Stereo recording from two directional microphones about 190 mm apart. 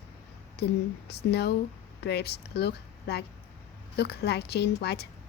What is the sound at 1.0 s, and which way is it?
A woman's voice, 60° left (ahead or behind).